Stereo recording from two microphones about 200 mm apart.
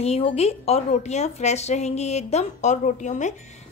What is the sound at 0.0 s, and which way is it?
Speech, 30° left (ahead or behind).